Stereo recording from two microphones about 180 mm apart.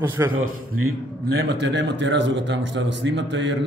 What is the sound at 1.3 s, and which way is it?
A man's voice, 70° right (ahead or behind).